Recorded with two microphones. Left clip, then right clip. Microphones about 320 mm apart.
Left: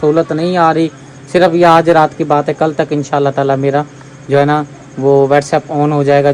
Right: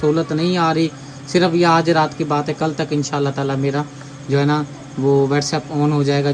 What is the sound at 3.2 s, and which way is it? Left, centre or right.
Speech, left.